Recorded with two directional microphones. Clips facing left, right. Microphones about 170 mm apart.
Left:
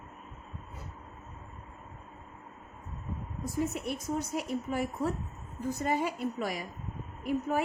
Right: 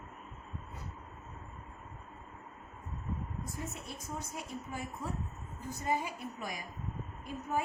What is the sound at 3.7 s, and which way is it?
A woman's voice, 75° left (ahead or behind).